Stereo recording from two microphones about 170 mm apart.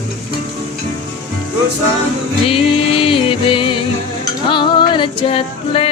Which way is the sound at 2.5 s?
35° left (ahead or behind).